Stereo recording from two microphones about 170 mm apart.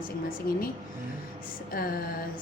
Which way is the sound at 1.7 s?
60° left (ahead or behind).